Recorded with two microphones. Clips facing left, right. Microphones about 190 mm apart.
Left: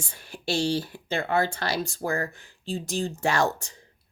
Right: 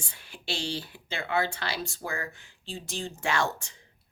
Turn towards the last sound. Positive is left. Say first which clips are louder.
# left 5 dB
turn(degrees=40)  # may be behind; listen again after turning